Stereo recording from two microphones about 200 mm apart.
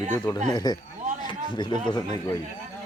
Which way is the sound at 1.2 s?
20° left (ahead or behind).